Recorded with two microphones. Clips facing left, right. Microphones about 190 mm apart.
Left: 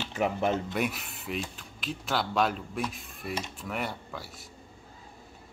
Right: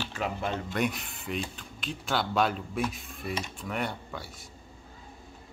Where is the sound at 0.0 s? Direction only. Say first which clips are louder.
Left 4 dB; 20° left (ahead or behind).